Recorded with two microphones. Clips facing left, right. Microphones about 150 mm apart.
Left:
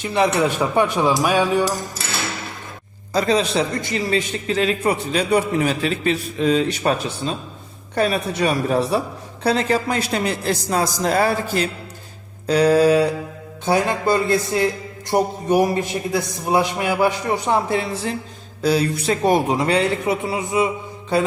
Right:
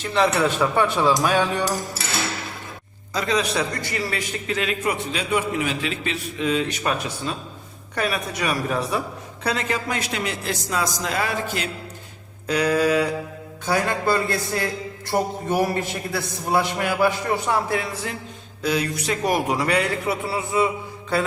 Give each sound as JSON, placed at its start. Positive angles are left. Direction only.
{"t": 0.0, "sound": "a man's voice", "side_deg": 15}
{"t": 3.1, "sound": "a man's voice", "side_deg": 35}
{"t": 13.7, "sound": "a man's voice", "side_deg": 20}